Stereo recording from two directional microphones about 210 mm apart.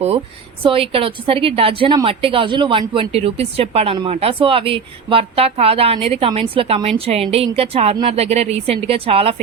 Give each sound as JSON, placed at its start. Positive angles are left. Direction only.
{"t": 0.6, "sound": "a woman's voice", "side_deg": -25}